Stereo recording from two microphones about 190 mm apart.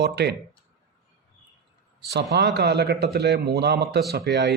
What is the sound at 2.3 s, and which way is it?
Speech, 60° right (ahead or behind).